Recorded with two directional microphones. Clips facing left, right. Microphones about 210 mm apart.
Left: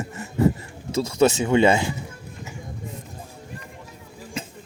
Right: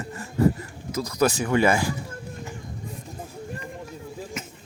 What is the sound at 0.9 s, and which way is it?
Speech, 25° left (ahead or behind).